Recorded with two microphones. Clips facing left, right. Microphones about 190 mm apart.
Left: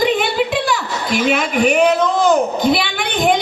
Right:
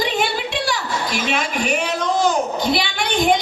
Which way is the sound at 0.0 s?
55° left (ahead or behind).